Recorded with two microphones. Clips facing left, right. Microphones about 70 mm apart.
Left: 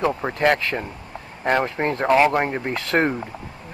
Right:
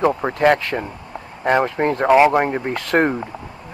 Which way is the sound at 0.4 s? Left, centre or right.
Centre.